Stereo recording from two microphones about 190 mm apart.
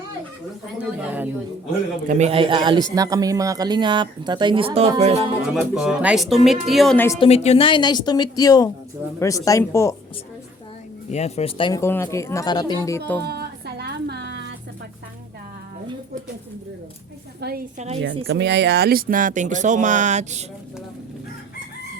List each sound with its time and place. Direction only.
0.8 s speech: 5° right (ahead or behind)
2.0 s speech: 35° right (ahead or behind)
5.5 s speech: 5° right (ahead or behind)
7.2 s speech: 35° left (ahead or behind); by 9.9 s 15° left (ahead or behind)
11.1 s speech: 35° left (ahead or behind)
11.8 s speech: 15° left (ahead or behind)
13.2 s music: 60° right (ahead or behind)
17.4 s a woman's voice: 60° right (ahead or behind)
17.7 s a woman's voice: 35° right (ahead or behind)
18.0 s speech: 65° right (ahead or behind); by 20.4 s 40° right (ahead or behind)